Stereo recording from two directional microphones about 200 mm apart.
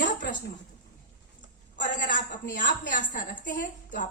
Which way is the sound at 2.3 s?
40° left (ahead or behind).